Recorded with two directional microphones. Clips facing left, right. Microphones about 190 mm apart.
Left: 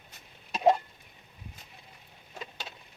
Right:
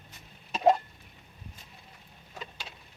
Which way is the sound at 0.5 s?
5° left (ahead or behind).